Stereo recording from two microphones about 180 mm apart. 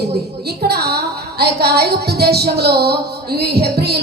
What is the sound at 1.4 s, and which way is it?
Speech, 65° right (ahead or behind).